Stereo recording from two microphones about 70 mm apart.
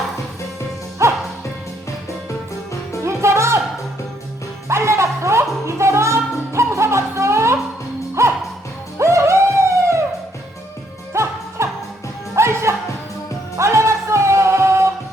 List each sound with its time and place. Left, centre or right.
1.0 s music: right
3.0 s music: right
4.7 s music: right
11.1 s music: right